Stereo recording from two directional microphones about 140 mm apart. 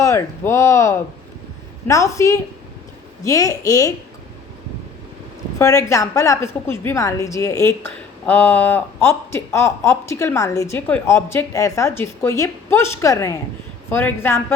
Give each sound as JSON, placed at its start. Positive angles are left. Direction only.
{"t": 0.0, "sound": "a woman's voice", "side_deg": 20}
{"t": 5.5, "sound": "a woman's voice", "side_deg": 20}